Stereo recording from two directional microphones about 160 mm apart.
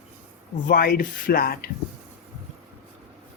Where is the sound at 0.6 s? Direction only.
65° left (ahead or behind).